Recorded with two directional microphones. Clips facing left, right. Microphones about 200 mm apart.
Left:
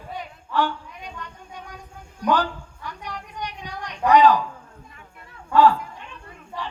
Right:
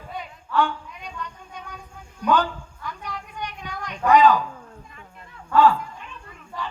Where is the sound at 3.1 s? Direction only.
35° left (ahead or behind).